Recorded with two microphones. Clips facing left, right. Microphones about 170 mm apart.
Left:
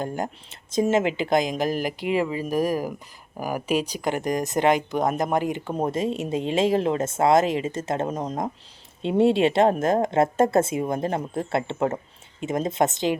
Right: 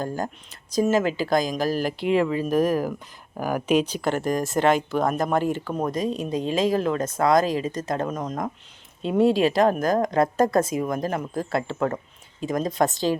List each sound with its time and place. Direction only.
0.0 s speech: 20° left (ahead or behind)
5.7 s speech: 30° left (ahead or behind)